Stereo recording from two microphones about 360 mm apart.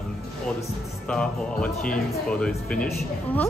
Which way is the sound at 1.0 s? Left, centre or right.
Centre.